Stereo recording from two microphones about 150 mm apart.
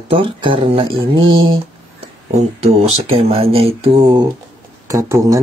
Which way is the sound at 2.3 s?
45° right (ahead or behind).